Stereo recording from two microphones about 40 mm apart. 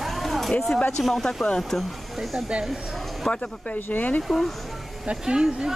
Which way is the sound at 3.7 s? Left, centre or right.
Left.